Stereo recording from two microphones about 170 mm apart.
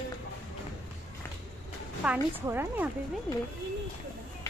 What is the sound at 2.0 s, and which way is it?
Speech, 10° right (ahead or behind).